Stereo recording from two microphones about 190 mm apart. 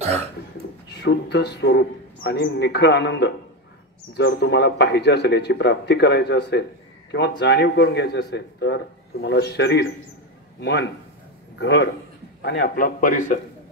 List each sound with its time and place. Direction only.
0.0 s speech: 35° right (ahead or behind)
1.0 s a man's voice: 60° left (ahead or behind); by 13.4 s 45° left (ahead or behind)